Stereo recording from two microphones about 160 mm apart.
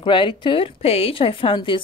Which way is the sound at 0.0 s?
30° left (ahead or behind).